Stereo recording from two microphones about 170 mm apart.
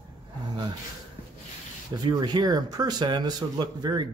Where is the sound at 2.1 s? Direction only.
25° right (ahead or behind).